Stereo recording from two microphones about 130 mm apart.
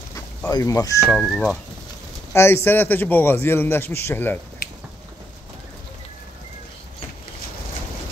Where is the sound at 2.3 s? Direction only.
20° left (ahead or behind).